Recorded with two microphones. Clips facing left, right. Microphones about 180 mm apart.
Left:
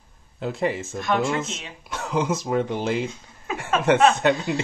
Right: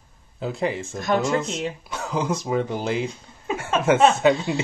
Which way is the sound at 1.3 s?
Centre (ahead or behind).